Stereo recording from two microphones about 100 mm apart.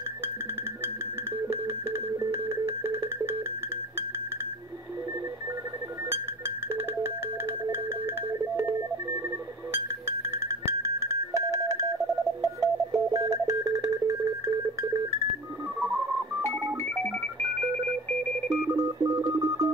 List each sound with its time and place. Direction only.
1.5 s music: 25° right (ahead or behind)
10.6 s music: 30° right (ahead or behind)
15.8 s telephone dialing: 15° right (ahead or behind)
18.7 s telephone dialing: 35° right (ahead or behind)